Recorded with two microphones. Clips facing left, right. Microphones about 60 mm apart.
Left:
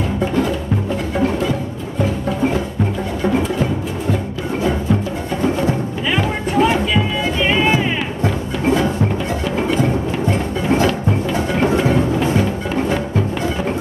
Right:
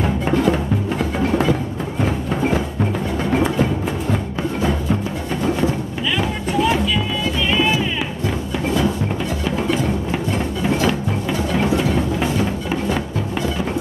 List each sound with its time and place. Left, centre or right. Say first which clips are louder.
6.1 s vehicle: left 4 dB; left
7.5 s music: left 1 dB; left
11.6 s music: left 4 dB; left